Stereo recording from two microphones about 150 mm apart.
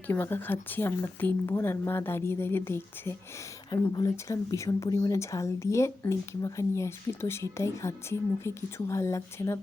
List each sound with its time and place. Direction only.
0.1 s speech: 15° left (ahead or behind)